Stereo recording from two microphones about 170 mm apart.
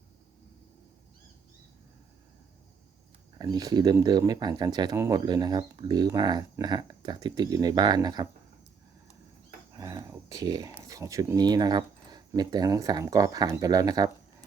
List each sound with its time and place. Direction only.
3.3 s speech: 25° right (ahead or behind)
9.7 s speech: 20° right (ahead or behind)